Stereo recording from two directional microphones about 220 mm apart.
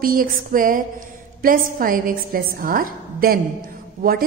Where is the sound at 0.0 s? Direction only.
40° right (ahead or behind).